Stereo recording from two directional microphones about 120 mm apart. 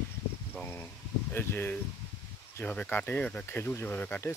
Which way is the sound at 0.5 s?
15° left (ahead or behind).